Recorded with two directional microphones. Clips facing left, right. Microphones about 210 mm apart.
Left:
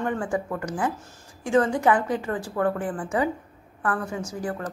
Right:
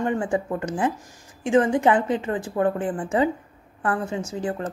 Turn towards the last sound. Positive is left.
turn(degrees=-25)  # may be behind; listen again after turning